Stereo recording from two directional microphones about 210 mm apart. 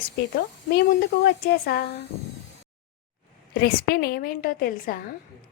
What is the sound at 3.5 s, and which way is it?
A woman's voice, 45° left (ahead or behind).